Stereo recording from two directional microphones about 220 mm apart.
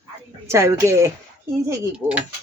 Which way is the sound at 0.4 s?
15° right (ahead or behind).